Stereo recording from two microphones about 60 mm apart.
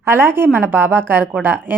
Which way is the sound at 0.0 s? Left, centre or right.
Right.